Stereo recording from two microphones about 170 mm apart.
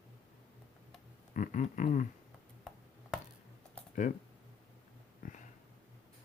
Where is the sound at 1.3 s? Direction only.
50° left (ahead or behind).